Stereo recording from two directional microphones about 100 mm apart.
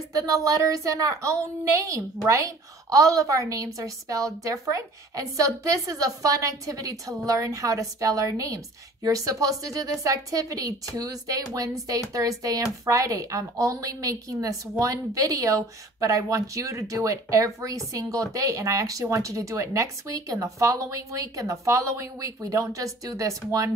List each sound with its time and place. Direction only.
0.1 s a woman's voice: 35° right (ahead or behind)